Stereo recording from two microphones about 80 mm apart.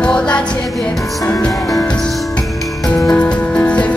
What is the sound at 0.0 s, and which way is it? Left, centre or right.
Music, centre.